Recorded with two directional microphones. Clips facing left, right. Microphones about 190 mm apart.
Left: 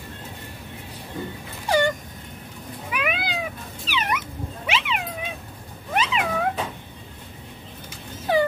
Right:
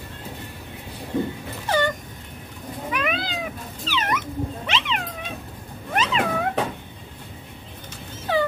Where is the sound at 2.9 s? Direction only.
10° left (ahead or behind).